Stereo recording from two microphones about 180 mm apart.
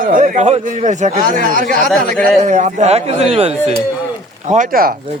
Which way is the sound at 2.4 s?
40° right (ahead or behind).